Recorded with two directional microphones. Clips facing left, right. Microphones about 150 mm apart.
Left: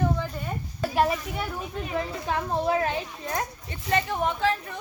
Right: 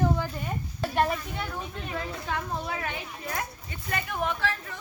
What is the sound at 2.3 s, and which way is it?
Speech, 30° left (ahead or behind).